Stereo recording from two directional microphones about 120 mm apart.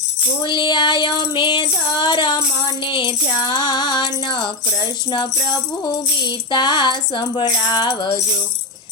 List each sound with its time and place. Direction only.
0.4 s music: 40° left (ahead or behind)
5.8 s music: 40° left (ahead or behind)